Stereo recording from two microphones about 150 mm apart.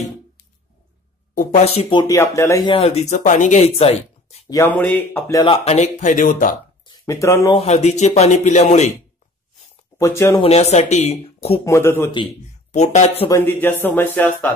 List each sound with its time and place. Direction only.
1.3 s speech: 55° left (ahead or behind)
2.0 s speech: 20° left (ahead or behind)
2.6 s speech: 40° left (ahead or behind)
4.5 s speech: 15° left (ahead or behind)
5.4 s speech: 40° left (ahead or behind); by 6.5 s 60° left (ahead or behind)
6.9 s speech: 20° left (ahead or behind)
7.5 s speech: 45° left (ahead or behind)
9.9 s speech: 20° left (ahead or behind)
10.4 s speech: 45° left (ahead or behind)
11.6 s speech: 20° left (ahead or behind)
12.7 s speech: 50° left (ahead or behind)
13.3 s speech: 15° left (ahead or behind)